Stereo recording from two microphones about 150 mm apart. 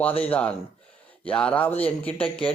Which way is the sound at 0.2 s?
10° left (ahead or behind).